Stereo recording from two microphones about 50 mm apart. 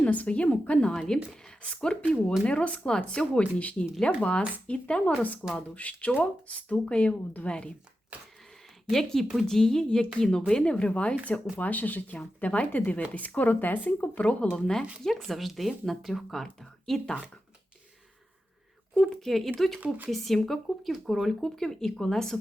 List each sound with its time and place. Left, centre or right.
0.0 s speech: left
0.9 s speech: centre
5.1 s speech: left
8.1 s a sound: right
8.9 s speech: centre; by 14.6 s left
15.0 s speech: centre
18.9 s speech: centre